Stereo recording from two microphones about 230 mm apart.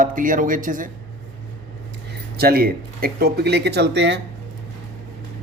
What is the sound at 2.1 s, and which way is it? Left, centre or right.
Speech, right.